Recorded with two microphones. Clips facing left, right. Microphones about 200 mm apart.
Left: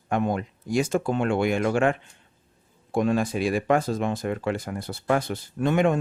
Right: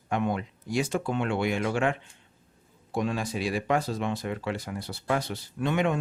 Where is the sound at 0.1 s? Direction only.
45° left (ahead or behind).